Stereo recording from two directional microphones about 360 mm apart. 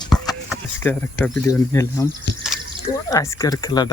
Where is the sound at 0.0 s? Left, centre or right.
Centre.